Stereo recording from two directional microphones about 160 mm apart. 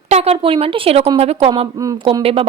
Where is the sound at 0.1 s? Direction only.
40° right (ahead or behind).